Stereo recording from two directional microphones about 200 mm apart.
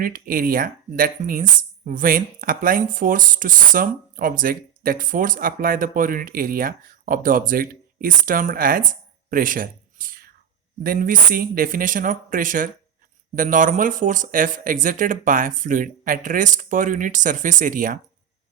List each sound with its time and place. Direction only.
0.0 s speech: 45° right (ahead or behind)